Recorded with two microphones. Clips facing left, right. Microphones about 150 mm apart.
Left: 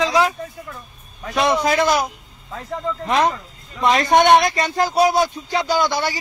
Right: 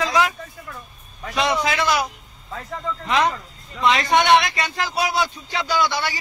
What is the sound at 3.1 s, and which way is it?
Speech, 45° left (ahead or behind).